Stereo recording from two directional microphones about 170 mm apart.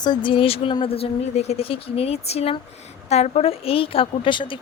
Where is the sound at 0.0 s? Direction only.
25° left (ahead or behind).